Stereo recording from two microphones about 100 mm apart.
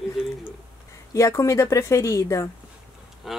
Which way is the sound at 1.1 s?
30° left (ahead or behind).